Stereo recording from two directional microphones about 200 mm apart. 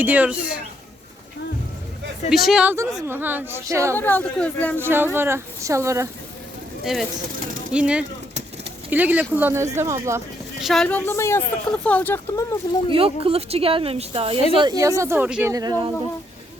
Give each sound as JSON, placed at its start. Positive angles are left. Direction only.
{"t": 0.0, "sound": "speech", "side_deg": -5}
{"t": 2.3, "sound": "speech", "side_deg": 0}
{"t": 3.9, "sound": "speech", "side_deg": 10}
{"t": 4.8, "sound": "speech", "side_deg": -10}
{"t": 6.8, "sound": "speech", "side_deg": 0}
{"t": 10.6, "sound": "speech", "side_deg": 0}
{"t": 12.9, "sound": "a woman's voice", "side_deg": -25}